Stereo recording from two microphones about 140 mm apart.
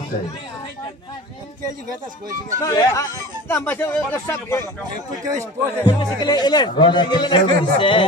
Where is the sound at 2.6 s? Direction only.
25° left (ahead or behind).